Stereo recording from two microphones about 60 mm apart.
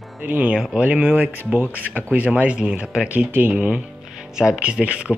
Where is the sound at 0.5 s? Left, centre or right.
Centre.